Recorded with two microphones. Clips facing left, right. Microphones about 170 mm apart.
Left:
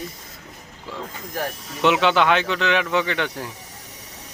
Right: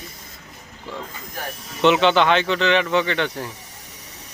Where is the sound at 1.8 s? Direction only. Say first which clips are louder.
Right 2 dB; 5° left (ahead or behind).